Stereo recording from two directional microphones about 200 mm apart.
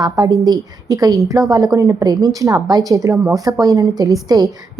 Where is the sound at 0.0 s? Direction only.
15° right (ahead or behind).